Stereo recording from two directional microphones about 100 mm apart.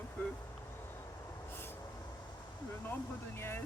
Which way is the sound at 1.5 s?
20° left (ahead or behind).